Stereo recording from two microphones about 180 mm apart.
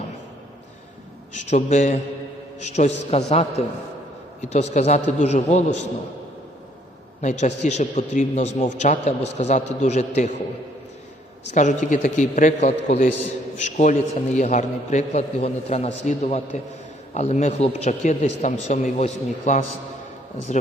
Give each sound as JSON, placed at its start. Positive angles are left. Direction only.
{"t": 1.5, "sound": "a man's voice", "side_deg": 40}
{"t": 7.2, "sound": "a man's voice", "side_deg": 40}
{"t": 11.5, "sound": "a man's voice", "side_deg": 45}